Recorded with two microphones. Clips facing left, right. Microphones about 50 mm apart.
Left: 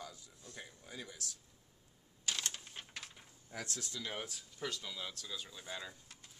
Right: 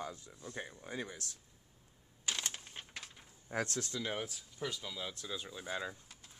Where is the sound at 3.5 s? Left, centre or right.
Right.